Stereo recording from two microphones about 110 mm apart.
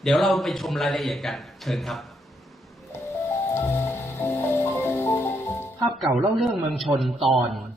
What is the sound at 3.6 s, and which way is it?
Music, 20° left (ahead or behind).